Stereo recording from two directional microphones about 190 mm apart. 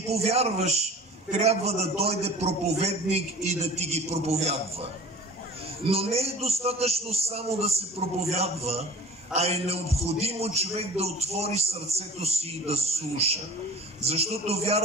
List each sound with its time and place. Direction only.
0.1 s a man's voice: 35° right (ahead or behind)
5.9 s a man's voice: 30° right (ahead or behind)